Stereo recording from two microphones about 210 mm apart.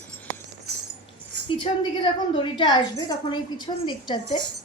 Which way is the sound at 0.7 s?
50° right (ahead or behind).